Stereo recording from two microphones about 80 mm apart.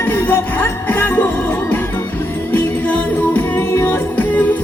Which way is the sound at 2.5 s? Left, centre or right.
Centre.